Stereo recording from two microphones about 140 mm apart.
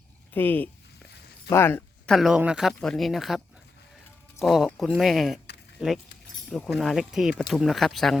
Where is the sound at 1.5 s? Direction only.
15° left (ahead or behind).